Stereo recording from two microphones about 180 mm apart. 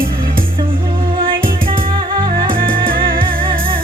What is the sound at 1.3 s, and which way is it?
Music, 50° right (ahead or behind).